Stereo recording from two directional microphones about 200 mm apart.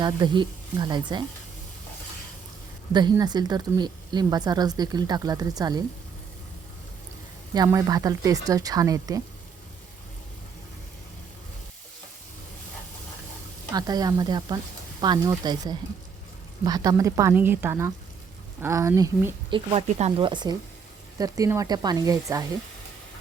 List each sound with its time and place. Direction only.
0.0 s a woman's voice: 20° right (ahead or behind)
2.9 s a woman's voice: 20° right (ahead or behind)
7.5 s speech: 20° right (ahead or behind)
13.7 s a woman's voice: 20° right (ahead or behind)